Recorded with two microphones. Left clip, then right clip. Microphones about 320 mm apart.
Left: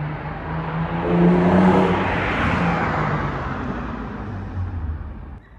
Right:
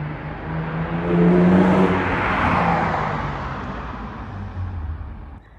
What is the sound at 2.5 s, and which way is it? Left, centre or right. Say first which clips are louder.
Vehicle: right 2 dB; right.